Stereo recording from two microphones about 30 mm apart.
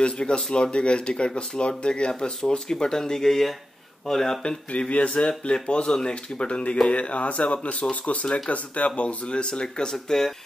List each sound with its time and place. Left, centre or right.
0.2 s speech: left
3.0 s speech: centre
4.4 s speech: left
10.0 s speech: centre